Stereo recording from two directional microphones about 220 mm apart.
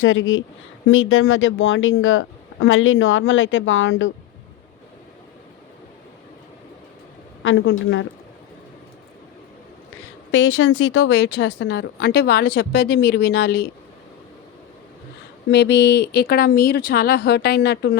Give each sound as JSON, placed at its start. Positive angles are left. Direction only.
{"t": 0.0, "sound": "speech", "side_deg": 60}
{"t": 7.4, "sound": "speech", "side_deg": 65}
{"t": 10.3, "sound": "a woman's voice", "side_deg": 60}
{"t": 15.4, "sound": "a woman's voice", "side_deg": 50}